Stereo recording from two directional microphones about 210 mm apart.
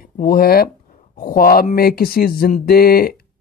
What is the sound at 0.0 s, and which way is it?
Speech, 45° left (ahead or behind).